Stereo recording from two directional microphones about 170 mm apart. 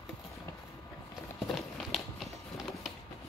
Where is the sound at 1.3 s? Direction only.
Centre (ahead or behind).